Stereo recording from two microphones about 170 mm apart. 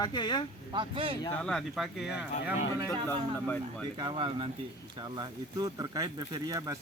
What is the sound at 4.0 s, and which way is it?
Speech, 30° right (ahead or behind).